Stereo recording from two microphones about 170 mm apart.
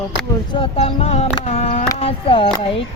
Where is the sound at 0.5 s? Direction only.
35° left (ahead or behind).